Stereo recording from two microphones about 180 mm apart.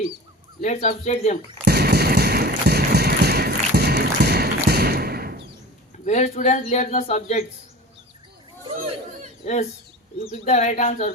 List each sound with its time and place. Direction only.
0.6 s a man's voice: 40° left (ahead or behind)
1.6 s fireworks: 65° right (ahead or behind)
6.1 s a man's voice: 40° left (ahead or behind)
9.4 s a man's voice: 40° left (ahead or behind)